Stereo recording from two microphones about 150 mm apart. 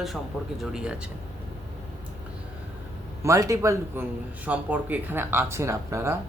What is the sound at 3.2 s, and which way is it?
Speech, 20° right (ahead or behind).